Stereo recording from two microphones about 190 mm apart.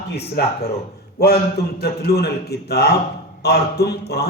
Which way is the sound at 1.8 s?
55° left (ahead or behind).